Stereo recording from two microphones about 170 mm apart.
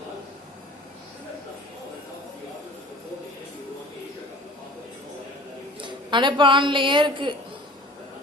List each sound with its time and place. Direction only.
5.8 s a woman's voice: 30° right (ahead or behind)